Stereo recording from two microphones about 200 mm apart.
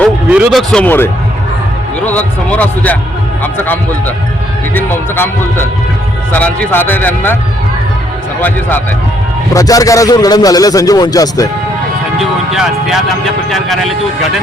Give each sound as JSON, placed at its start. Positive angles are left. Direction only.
{"t": 0.3, "sound": "a man's voice", "side_deg": -5}
{"t": 8.4, "sound": "a man's voice", "side_deg": 10}
{"t": 12.2, "sound": "speech", "side_deg": 0}